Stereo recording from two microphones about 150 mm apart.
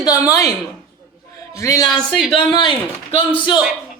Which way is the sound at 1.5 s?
20° left (ahead or behind).